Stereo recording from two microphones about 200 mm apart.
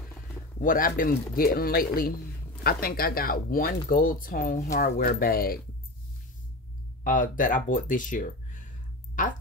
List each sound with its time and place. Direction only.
0.6 s speech: 45° left (ahead or behind)
7.1 s speech: 40° left (ahead or behind)